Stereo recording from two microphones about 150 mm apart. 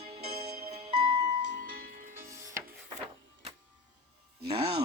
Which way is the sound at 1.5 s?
75° right (ahead or behind).